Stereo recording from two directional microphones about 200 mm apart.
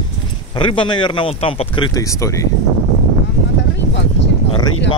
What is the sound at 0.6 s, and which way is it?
Speech, 25° left (ahead or behind).